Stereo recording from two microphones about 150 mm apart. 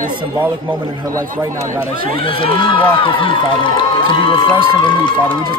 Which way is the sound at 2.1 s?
35° left (ahead or behind).